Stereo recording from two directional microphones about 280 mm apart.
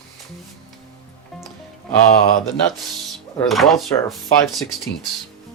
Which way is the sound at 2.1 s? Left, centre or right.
Left.